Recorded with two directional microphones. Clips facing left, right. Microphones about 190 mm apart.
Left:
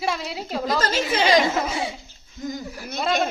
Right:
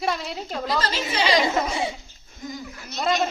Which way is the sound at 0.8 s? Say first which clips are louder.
Left 3 dB; 45° left (ahead or behind).